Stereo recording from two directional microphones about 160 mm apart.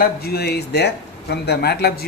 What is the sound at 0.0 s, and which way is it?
Speech, 75° left (ahead or behind).